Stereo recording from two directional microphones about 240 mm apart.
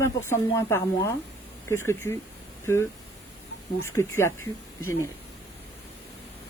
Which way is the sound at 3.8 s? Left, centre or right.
Centre.